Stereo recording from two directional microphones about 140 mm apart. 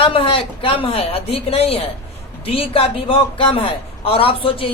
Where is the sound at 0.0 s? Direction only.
40° left (ahead or behind).